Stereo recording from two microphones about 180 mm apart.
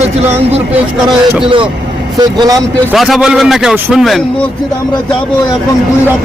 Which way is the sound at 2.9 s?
Centre (ahead or behind).